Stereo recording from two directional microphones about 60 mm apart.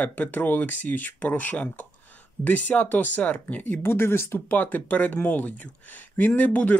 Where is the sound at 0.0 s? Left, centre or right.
Left.